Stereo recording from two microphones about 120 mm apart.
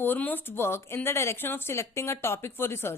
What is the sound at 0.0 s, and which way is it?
Speech, 15° left (ahead or behind).